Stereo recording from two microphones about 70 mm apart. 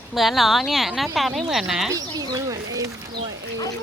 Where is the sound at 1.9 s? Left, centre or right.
Right.